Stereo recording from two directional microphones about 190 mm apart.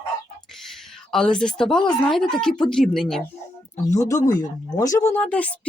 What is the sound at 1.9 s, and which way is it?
Speech, centre (ahead or behind).